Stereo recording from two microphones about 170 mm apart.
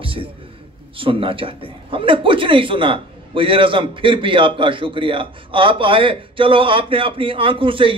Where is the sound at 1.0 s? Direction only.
30° right (ahead or behind).